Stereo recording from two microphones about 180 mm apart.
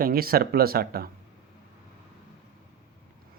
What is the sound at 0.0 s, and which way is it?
Speech, 55° right (ahead or behind).